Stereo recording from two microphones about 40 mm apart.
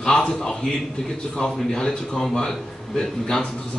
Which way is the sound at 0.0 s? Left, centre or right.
Centre.